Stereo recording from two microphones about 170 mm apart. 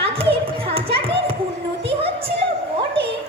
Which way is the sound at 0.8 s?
35° right (ahead or behind).